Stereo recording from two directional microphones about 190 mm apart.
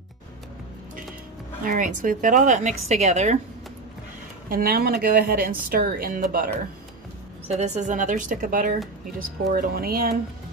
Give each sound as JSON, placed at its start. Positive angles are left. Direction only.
{"t": 1.6, "sound": "speech", "side_deg": -45}
{"t": 4.5, "sound": "speech", "side_deg": -50}
{"t": 7.4, "sound": "speech", "side_deg": -35}